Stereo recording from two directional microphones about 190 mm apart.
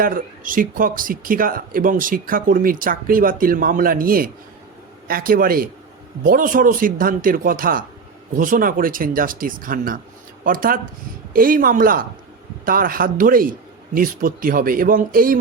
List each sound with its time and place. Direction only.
0.0 s speech: 45° right (ahead or behind)